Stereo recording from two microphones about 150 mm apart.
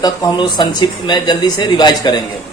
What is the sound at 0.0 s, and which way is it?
Speech, 30° left (ahead or behind).